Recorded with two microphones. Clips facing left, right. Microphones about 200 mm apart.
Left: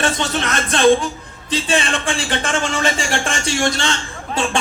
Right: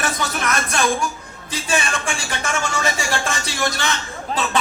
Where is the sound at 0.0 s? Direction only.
30° left (ahead or behind).